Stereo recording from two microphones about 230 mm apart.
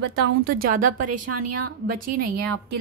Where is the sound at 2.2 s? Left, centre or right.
Right.